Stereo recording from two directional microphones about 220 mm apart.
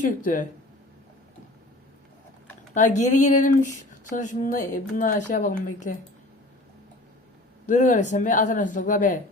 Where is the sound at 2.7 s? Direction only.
35° left (ahead or behind).